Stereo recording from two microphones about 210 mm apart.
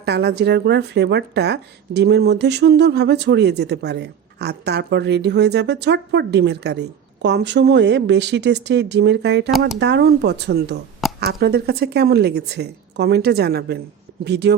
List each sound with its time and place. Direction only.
0.0 s speech: 50° right (ahead or behind)